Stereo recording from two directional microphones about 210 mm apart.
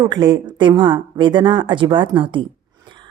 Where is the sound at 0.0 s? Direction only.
20° right (ahead or behind).